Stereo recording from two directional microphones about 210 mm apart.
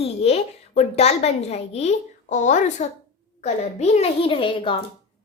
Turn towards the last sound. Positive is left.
turn(degrees=25)  # may be behind; listen again after turning